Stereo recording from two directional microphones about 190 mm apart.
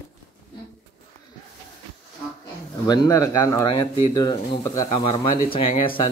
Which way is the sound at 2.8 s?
20° left (ahead or behind).